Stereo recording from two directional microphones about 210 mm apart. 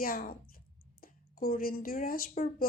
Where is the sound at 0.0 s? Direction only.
45° left (ahead or behind).